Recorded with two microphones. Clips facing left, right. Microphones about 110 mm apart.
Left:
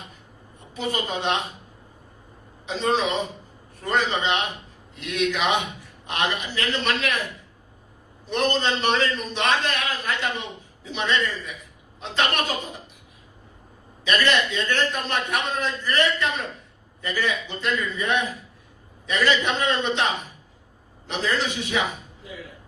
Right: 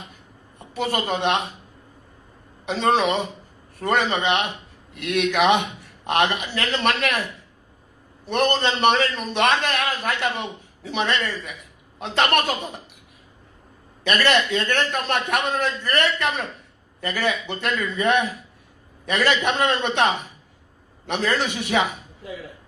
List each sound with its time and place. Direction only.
0.7 s a man's voice: 65° right (ahead or behind)
2.6 s a man's voice: 65° right (ahead or behind)
8.3 s a man's voice: 65° right (ahead or behind)
14.0 s a man's voice: 70° right (ahead or behind)
21.1 s a man's voice: 65° right (ahead or behind)